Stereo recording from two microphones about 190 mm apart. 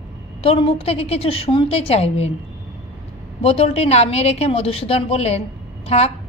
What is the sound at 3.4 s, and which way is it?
A woman's voice, 30° left (ahead or behind).